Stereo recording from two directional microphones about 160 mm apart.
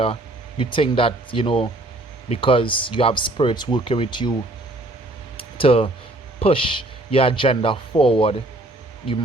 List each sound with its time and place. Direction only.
0.6 s speech: 35° left (ahead or behind)
5.5 s speech: 35° left (ahead or behind)